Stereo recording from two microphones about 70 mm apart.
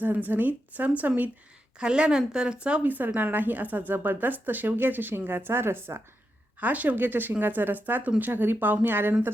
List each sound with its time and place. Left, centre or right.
0.0 s speech: right
1.8 s a woman's voice: centre; by 6.0 s right
6.6 s speech: right